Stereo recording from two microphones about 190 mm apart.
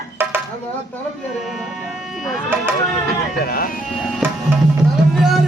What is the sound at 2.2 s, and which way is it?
Speech, 5° right (ahead or behind).